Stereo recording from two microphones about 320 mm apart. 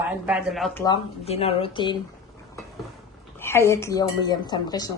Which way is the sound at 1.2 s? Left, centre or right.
Centre.